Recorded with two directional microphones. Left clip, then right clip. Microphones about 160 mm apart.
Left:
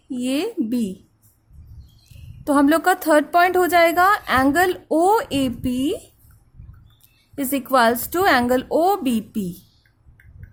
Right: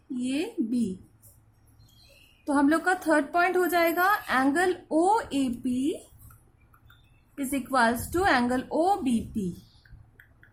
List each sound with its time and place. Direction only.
0.2 s a woman's voice: 60° left (ahead or behind)
2.4 s a woman's voice: 60° left (ahead or behind)
7.3 s a woman's voice: 55° left (ahead or behind)